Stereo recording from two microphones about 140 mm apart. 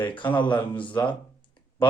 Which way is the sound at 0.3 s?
35° left (ahead or behind).